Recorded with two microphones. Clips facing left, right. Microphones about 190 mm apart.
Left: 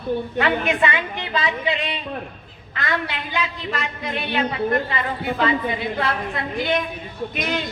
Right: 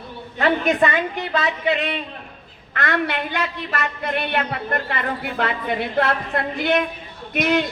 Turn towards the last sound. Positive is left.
turn(degrees=-60)  # may be behind; listen again after turning